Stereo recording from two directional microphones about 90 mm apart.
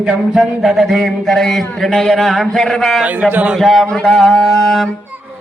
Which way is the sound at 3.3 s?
15° right (ahead or behind).